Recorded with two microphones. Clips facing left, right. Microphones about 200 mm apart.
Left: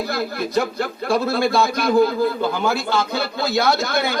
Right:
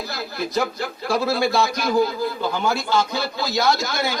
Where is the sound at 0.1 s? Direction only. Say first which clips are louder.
Left 2 dB; 55° left (ahead or behind).